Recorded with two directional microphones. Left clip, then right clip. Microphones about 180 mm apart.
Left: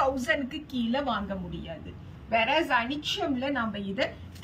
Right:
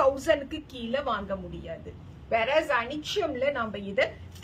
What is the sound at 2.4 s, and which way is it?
A man's voice, 40° right (ahead or behind).